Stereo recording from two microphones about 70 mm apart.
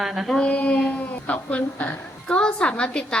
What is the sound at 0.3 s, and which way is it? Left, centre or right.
Speech, centre.